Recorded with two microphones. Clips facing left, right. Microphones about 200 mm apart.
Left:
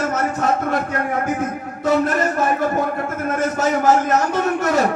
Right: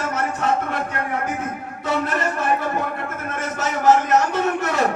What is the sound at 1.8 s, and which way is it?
A man's voice, 40° left (ahead or behind).